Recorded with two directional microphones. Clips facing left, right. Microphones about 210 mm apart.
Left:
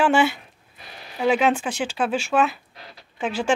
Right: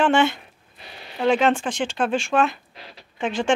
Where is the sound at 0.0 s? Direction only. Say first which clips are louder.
Even; 5° left (ahead or behind).